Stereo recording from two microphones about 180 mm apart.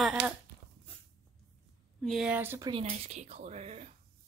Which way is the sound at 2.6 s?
30° right (ahead or behind).